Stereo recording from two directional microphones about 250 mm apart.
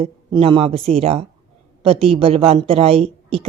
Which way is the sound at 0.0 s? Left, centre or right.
Right.